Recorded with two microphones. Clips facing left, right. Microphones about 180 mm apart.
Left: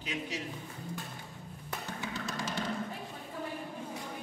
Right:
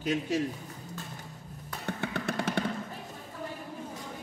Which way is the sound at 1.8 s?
60° right (ahead or behind).